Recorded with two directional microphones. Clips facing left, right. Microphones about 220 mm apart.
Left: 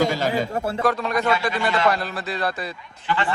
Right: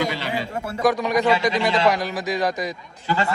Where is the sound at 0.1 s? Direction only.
45° left (ahead or behind).